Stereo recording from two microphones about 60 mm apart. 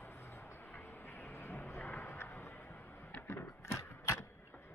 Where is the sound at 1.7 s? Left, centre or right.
Left.